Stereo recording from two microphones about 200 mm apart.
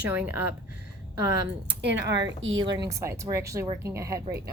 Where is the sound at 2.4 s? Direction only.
25° right (ahead or behind).